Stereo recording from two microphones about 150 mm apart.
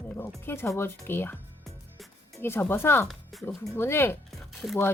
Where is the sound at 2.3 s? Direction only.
15° left (ahead or behind).